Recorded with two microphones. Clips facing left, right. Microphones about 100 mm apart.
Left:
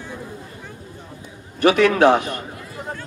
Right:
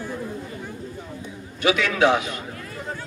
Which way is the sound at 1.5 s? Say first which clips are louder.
Left 6 dB; 45° left (ahead or behind).